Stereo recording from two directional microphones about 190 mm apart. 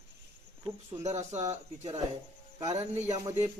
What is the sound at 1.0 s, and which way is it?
Speech, 35° right (ahead or behind).